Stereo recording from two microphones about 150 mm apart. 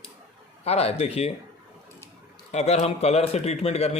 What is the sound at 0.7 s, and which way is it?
Speech, 45° left (ahead or behind).